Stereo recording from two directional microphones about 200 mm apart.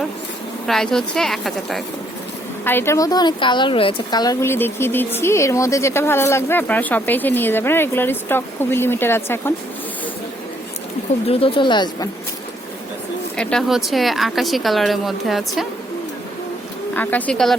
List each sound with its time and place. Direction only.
0.7 s a woman's voice: centre (ahead or behind)
11.3 s speech: 30° left (ahead or behind)
13.3 s a woman's voice: 5° left (ahead or behind)
16.9 s a woman's voice: 10° left (ahead or behind)